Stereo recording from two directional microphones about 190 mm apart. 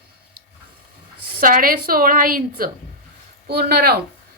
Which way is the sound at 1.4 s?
45° right (ahead or behind).